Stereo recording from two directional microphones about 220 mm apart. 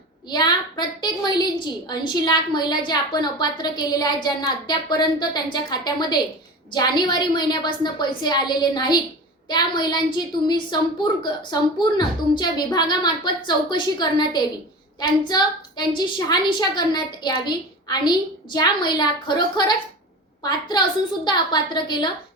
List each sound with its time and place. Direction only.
0.3 s a woman's voice: 20° left (ahead or behind)